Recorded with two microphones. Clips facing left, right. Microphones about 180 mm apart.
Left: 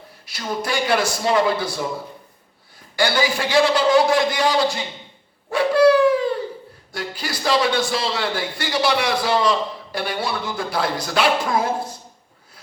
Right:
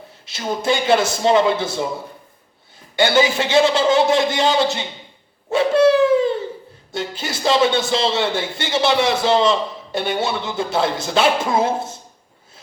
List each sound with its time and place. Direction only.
0.3 s speech: 25° right (ahead or behind)
2.9 s speech: 25° right (ahead or behind)
5.5 s bird: 25° right (ahead or behind)
6.9 s speech: 25° right (ahead or behind)